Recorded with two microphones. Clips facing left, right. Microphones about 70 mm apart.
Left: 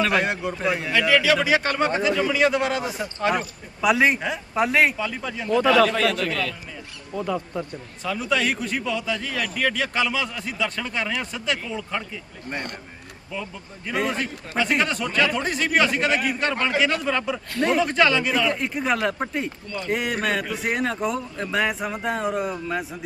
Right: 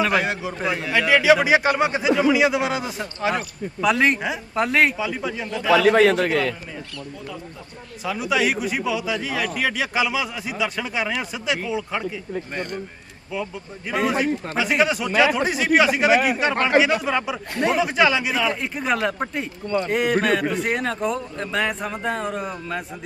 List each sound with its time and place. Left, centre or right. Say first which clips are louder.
0.0 s speech: right 1 dB; centre
0.9 s speech: right 4 dB; centre
5.5 s a man's voice: left 6 dB; left
5.9 s a man's voice: right 7 dB; right
8.0 s a man's voice: right 2 dB; centre
13.3 s a man's voice: right 4 dB; centre
16.1 s a man's voice: right 5 dB; right
16.8 s a man's voice: right 2 dB; centre
19.6 s a man's voice: right 9 dB; right
19.9 s speech: right 3 dB; centre